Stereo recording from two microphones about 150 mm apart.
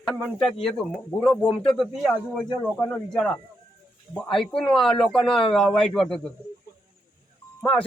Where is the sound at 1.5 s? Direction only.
35° left (ahead or behind).